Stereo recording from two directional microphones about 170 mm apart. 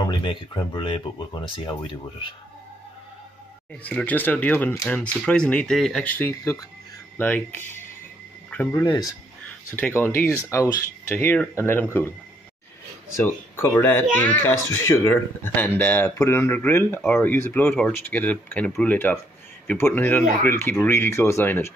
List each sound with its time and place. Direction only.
0.0 s speech: 25° left (ahead or behind)
3.8 s speech: 10° left (ahead or behind)
8.7 s speech: 25° left (ahead or behind)
9.7 s speech: 10° left (ahead or behind)
13.1 s speech: 15° left (ahead or behind)